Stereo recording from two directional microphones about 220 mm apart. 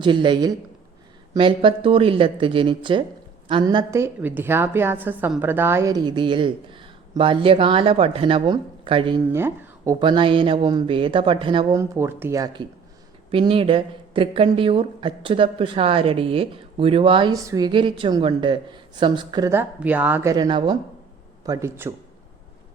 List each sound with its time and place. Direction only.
0.0 s speech: 20° right (ahead or behind)
9.3 s speech: 15° right (ahead or behind)